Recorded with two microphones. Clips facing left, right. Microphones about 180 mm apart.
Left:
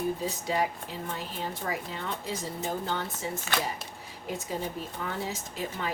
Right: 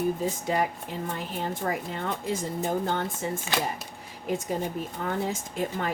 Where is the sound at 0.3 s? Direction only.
50° right (ahead or behind).